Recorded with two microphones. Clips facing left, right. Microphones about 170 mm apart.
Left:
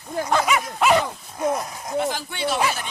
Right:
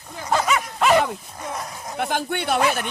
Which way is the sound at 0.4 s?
10° left (ahead or behind).